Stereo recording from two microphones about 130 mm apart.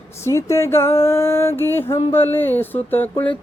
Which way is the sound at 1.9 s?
15° left (ahead or behind).